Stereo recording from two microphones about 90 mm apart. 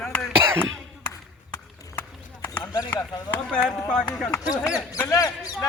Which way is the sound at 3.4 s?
10° left (ahead or behind).